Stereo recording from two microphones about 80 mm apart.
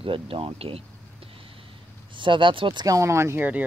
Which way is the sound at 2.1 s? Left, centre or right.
Right.